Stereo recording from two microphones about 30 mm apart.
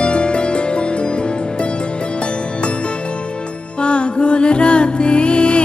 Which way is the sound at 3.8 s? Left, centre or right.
Left.